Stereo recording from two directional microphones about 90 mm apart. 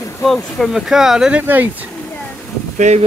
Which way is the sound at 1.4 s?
20° right (ahead or behind).